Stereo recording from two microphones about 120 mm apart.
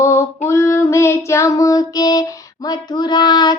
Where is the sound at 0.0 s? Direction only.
25° left (ahead or behind).